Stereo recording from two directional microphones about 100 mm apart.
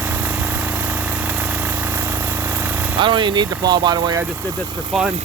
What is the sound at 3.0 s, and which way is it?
Speech, 55° right (ahead or behind).